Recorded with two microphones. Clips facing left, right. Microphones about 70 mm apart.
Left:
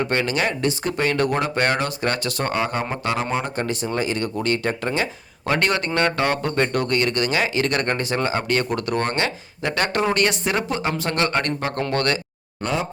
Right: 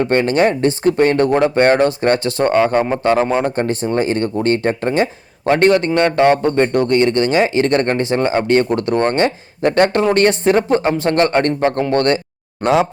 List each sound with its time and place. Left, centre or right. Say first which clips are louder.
0.0 s a man's voice: right 8 dB; right
12.6 s speech: right 10 dB; right